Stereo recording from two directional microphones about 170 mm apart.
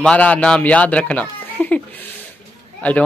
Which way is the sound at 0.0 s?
5° left (ahead or behind).